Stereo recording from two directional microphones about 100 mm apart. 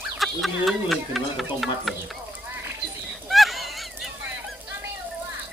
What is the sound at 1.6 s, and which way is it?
Speech, centre (ahead or behind).